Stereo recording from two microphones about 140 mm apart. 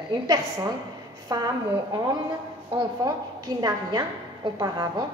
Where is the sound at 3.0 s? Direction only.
25° right (ahead or behind).